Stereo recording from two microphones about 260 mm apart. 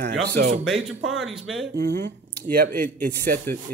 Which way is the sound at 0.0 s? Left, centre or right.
Right.